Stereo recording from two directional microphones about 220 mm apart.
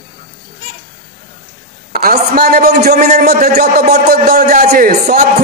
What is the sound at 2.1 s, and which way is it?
A man's voice, 40° right (ahead or behind).